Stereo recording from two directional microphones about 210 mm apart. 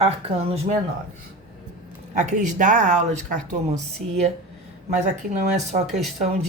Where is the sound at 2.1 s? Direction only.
35° right (ahead or behind).